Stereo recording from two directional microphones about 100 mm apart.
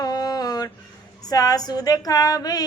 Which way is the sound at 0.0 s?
40° left (ahead or behind).